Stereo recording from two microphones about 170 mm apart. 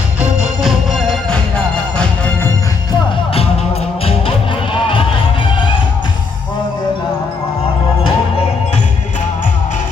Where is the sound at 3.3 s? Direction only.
35° left (ahead or behind).